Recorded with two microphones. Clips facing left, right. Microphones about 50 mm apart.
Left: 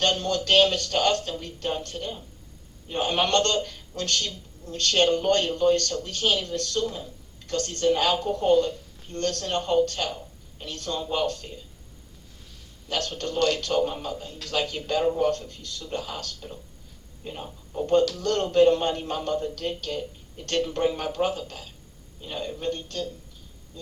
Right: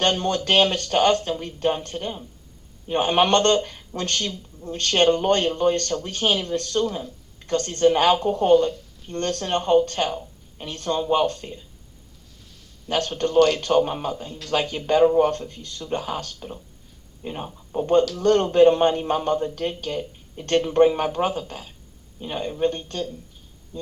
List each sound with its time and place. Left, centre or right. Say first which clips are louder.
0.0 s speech: right 3 dB; right
10.1 s a sound: right 5 dB; right
11.1 s speech: right 5 dB; right
12.9 s speech: right 7 dB; right